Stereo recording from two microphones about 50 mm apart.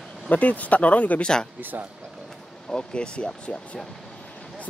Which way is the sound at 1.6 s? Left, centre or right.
Right.